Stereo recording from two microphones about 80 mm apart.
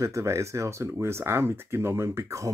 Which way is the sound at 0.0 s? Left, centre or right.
Right.